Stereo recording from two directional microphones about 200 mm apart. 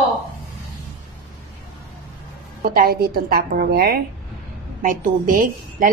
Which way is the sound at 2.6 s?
50° right (ahead or behind).